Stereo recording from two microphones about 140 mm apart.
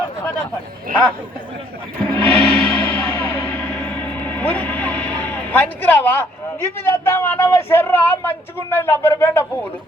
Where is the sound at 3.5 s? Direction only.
10° left (ahead or behind).